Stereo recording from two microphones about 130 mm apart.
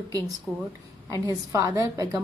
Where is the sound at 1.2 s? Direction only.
30° right (ahead or behind).